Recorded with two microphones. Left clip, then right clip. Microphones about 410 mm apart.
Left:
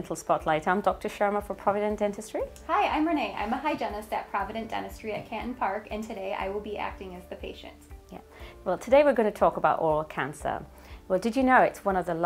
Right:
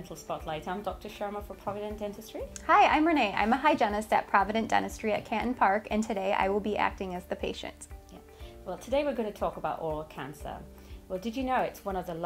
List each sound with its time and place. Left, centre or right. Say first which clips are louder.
0.1 s a woman's voice: left 10 dB; left
2.6 s a woman's voice: right 4 dB; right
8.6 s a woman's voice: left 9 dB; left